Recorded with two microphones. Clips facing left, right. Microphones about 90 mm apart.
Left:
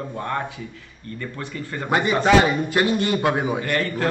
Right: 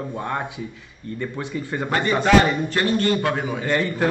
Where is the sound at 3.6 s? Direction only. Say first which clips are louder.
Right 2 dB; 20° right (ahead or behind).